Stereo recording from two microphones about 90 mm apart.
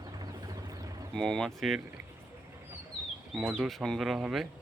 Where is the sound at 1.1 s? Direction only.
5° left (ahead or behind).